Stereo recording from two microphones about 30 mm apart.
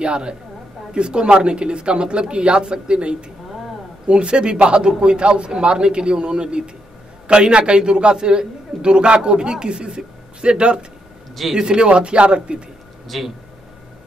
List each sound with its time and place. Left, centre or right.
0.0 s a man's voice: right
13.1 s speech: centre